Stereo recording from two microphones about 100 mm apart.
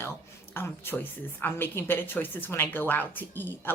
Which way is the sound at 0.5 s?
25° left (ahead or behind).